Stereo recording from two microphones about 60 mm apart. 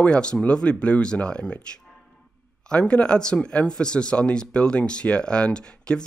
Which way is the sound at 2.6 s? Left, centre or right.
Centre.